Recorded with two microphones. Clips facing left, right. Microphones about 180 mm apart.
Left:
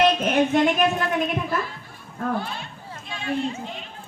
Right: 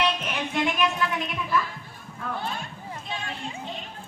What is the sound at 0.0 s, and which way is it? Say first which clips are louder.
A woman's voice: left 8 dB; 45° left (ahead or behind).